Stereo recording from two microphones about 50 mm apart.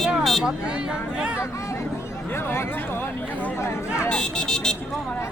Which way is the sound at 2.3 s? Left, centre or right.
Left.